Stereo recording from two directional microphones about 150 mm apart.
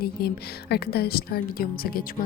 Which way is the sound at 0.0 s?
90° left.